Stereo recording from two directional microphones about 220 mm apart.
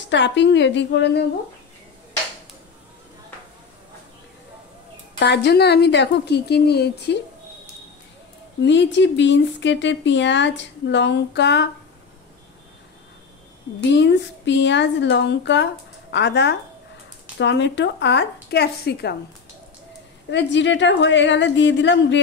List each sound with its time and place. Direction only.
0.1 s speech: 55° left (ahead or behind)
5.2 s speech: 50° left (ahead or behind)
8.6 s speech: 55° left (ahead or behind)
13.9 s speech: 55° left (ahead or behind)
20.2 s a woman's voice: 55° left (ahead or behind)